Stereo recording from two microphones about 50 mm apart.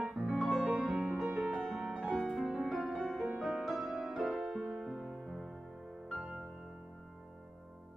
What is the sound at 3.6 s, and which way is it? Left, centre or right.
Music, centre.